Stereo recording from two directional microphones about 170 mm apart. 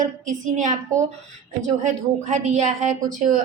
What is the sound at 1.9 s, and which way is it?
A woman's voice, 45° right (ahead or behind).